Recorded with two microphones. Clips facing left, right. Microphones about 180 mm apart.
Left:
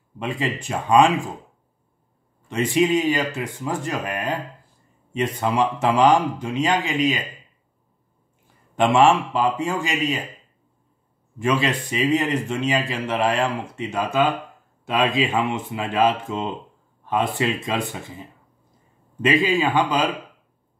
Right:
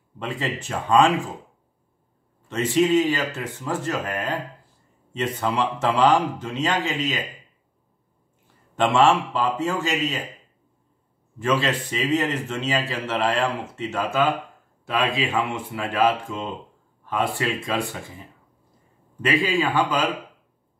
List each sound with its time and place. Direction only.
0.2 s speech: 15° left (ahead or behind)
2.4 s speech: 15° left (ahead or behind)
8.7 s speech: 15° left (ahead or behind)
11.3 s speech: 15° left (ahead or behind)
15.5 s speech: 20° left (ahead or behind)
19.2 s speech: 20° left (ahead or behind)